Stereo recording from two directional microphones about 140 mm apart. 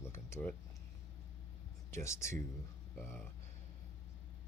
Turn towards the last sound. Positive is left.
turn(degrees=10)  # may be behind; listen again after turning